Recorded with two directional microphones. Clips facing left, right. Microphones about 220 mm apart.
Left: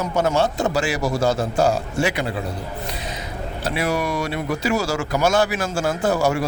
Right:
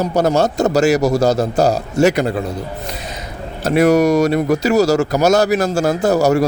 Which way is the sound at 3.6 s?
45° right (ahead or behind).